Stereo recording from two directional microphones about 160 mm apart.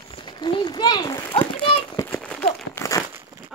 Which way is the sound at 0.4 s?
30° left (ahead or behind).